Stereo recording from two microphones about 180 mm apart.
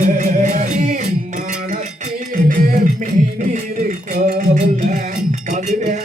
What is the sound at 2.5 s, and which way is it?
Music, 50° right (ahead or behind).